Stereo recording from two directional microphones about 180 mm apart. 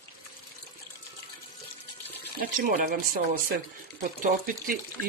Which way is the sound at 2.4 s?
50° right (ahead or behind).